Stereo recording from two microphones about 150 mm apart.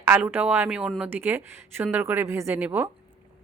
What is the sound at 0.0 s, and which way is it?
Speech, 10° right (ahead or behind).